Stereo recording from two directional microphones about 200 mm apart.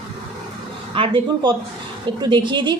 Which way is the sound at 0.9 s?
25° right (ahead or behind).